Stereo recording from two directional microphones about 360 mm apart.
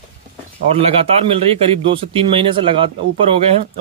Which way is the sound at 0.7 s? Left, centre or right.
Centre.